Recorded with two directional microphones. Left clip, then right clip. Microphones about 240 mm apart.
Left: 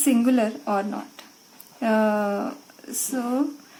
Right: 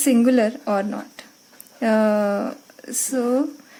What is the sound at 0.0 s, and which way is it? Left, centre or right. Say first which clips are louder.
A woman's voice: right 4 dB; right.